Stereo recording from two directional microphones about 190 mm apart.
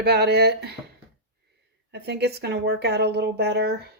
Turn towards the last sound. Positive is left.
turn(degrees=-55)  # may be behind; listen again after turning